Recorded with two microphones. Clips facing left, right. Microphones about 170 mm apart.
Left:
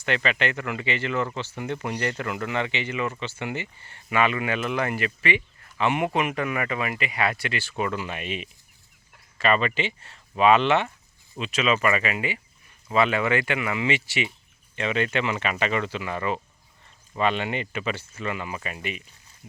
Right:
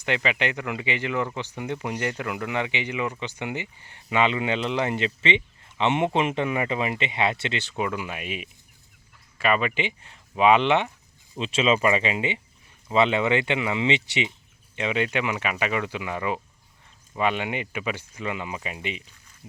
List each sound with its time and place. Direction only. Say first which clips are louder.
0.0 s speech: even; 15° right (ahead or behind)
7.9 s speech: left 1 dB; 10° right (ahead or behind)
11.3 s speech: right 2 dB; 25° right (ahead or behind)